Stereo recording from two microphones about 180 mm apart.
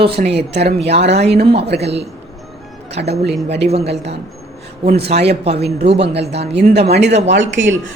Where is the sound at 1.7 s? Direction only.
70° right (ahead or behind).